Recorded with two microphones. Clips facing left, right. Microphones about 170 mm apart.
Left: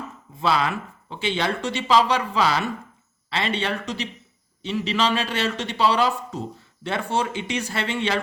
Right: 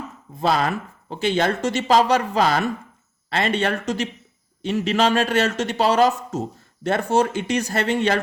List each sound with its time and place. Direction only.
0.3 s speech: 45° right (ahead or behind)